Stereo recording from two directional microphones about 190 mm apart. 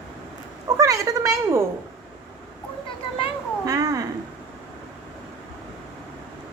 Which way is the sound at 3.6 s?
15° right (ahead or behind).